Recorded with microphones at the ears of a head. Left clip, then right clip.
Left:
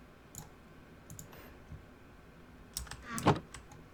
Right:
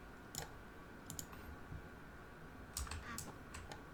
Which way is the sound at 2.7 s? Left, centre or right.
Left.